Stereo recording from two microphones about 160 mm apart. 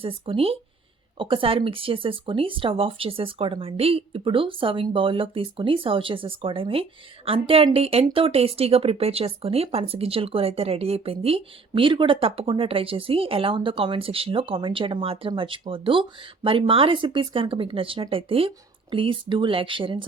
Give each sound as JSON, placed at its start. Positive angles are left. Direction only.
{"t": 0.0, "sound": "speech", "side_deg": -35}